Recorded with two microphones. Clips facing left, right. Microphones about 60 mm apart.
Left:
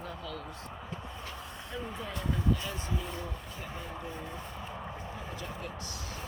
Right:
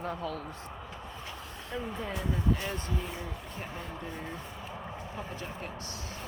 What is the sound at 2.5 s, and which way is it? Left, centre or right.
Speech, right.